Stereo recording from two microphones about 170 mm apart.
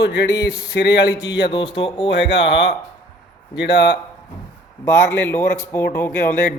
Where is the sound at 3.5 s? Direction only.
90° left.